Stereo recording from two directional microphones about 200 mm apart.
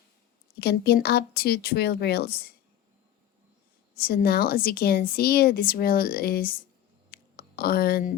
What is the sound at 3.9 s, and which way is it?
Speech, 50° left (ahead or behind).